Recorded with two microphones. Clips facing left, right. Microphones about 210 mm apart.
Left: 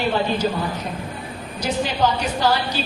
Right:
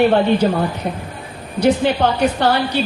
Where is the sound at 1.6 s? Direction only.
60° right (ahead or behind).